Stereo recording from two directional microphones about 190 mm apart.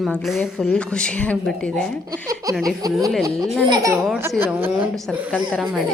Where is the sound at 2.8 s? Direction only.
20° right (ahead or behind).